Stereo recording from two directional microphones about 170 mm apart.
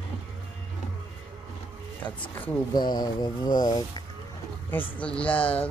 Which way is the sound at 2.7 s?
25° left (ahead or behind).